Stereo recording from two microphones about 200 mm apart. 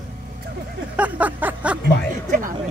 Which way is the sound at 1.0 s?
10° right (ahead or behind).